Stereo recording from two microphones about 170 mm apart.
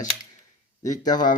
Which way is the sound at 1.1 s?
25° left (ahead or behind).